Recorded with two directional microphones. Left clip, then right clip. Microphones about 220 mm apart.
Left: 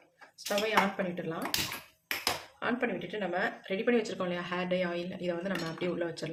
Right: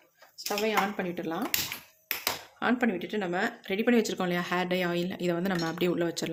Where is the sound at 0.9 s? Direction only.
45° right (ahead or behind).